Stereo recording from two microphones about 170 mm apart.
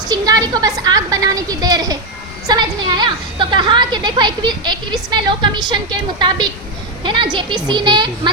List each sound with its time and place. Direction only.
0.1 s a woman's voice: 20° right (ahead or behind)